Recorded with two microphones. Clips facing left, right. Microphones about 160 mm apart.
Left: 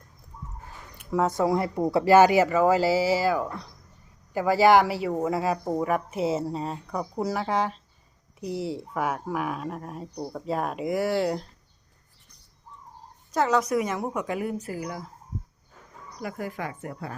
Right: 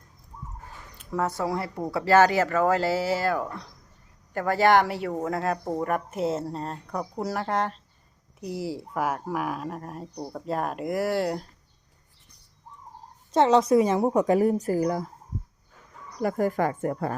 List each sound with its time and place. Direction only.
1.1 s speech: 15° left (ahead or behind); by 11.4 s centre (ahead or behind)
13.3 s a woman's voice: 25° right (ahead or behind)
16.2 s a woman's voice: 45° right (ahead or behind)